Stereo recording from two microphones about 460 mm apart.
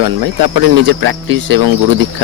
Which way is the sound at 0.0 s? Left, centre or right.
Right.